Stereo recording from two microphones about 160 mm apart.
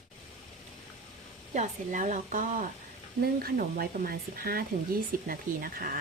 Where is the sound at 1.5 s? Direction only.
50° right (ahead or behind).